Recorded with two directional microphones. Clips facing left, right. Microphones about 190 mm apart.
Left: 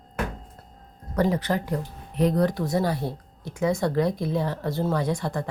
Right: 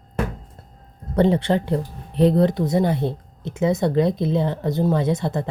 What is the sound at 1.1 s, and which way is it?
Speech, 30° right (ahead or behind).